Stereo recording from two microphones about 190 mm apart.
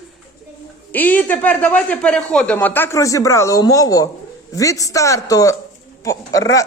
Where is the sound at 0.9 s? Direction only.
10° left (ahead or behind).